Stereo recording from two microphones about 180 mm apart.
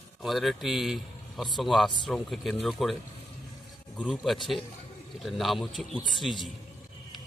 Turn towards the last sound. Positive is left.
turn(degrees=0)  # may be behind; listen again after turning